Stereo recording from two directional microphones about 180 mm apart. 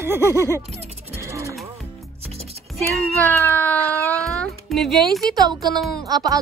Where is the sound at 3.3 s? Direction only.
10° left (ahead or behind).